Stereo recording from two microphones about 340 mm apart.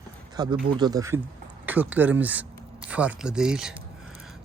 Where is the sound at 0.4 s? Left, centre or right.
Centre.